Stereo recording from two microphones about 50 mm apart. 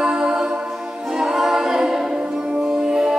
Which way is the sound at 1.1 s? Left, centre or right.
Centre.